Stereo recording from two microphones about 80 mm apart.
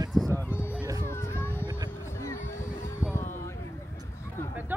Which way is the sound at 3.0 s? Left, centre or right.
Centre.